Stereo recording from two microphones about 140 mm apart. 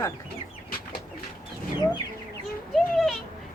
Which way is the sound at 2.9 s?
Centre (ahead or behind).